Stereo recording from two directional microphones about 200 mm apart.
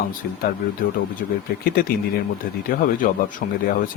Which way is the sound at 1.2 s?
45° left (ahead or behind).